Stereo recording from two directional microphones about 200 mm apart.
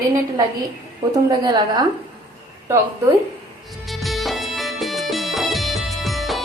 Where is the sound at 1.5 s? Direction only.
20° right (ahead or behind).